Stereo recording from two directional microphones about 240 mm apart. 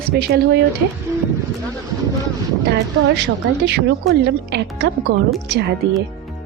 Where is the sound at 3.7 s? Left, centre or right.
Right.